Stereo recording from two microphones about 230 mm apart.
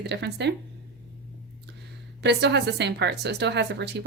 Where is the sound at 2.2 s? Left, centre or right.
Right.